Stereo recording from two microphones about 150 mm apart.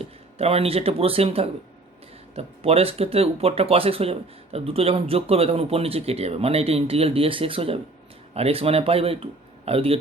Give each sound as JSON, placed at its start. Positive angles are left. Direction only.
{"t": 0.0, "sound": "speech", "side_deg": -40}